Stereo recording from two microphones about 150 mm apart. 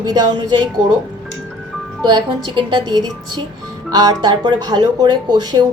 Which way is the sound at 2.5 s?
30° right (ahead or behind).